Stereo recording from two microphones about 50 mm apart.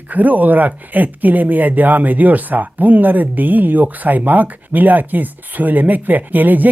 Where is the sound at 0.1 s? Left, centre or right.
Right.